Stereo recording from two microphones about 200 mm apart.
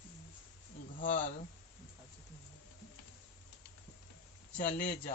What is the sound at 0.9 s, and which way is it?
Speech, 45° left (ahead or behind).